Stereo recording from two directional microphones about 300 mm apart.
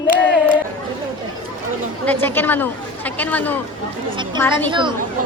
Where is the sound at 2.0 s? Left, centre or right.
Centre.